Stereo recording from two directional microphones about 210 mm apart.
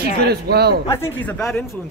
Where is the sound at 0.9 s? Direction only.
10° left (ahead or behind).